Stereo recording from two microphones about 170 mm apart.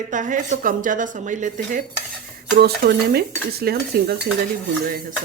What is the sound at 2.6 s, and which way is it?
Dishes, 70° right (ahead or behind).